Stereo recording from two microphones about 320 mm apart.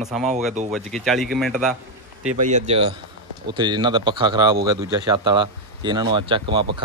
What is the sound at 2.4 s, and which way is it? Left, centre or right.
Speech, right.